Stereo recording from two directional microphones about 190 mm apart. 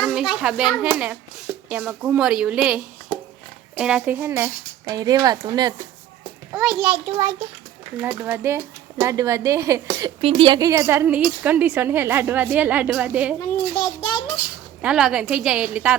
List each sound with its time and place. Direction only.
0.0 s a sound: 5° right (ahead or behind)
0.4 s a woman's voice: 5° right (ahead or behind); by 5.7 s 20° right (ahead or behind)
6.5 s a woman's voice: 5° right (ahead or behind)
10.2 s a woman's voice: 30° right (ahead or behind); by 13.3 s 5° right (ahead or behind)
13.8 s a sound: 20° left (ahead or behind)
14.8 s a woman's voice: 5° right (ahead or behind)